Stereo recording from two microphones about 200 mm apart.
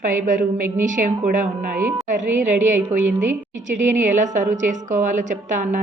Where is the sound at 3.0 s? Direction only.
10° right (ahead or behind).